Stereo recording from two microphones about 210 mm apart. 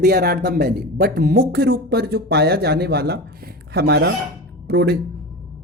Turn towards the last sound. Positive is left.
turn(degrees=-50)  # may be behind; listen again after turning